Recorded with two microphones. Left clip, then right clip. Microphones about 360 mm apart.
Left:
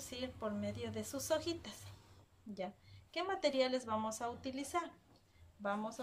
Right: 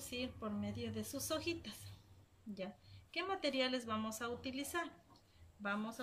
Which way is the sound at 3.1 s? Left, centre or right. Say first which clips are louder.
Left 3 dB; centre.